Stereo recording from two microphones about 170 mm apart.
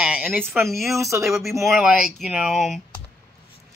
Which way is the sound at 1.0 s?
15° right (ahead or behind).